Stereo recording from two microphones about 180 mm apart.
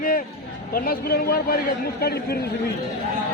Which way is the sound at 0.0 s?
50° left (ahead or behind).